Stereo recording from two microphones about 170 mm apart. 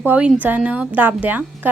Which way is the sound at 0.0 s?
10° right (ahead or behind).